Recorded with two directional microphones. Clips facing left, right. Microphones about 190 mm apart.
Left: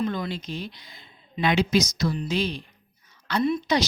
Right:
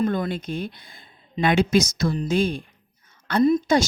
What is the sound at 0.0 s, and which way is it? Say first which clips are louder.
Speech: right 4 dB; 50° right (ahead or behind).